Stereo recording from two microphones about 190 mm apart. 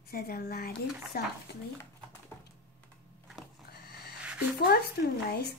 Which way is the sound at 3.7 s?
55° left (ahead or behind).